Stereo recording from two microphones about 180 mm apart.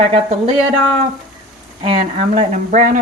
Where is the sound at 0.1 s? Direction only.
35° right (ahead or behind).